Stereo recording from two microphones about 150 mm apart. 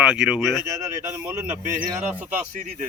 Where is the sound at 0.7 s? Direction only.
20° right (ahead or behind).